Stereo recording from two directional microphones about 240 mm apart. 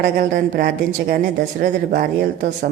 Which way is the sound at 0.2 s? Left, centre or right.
Right.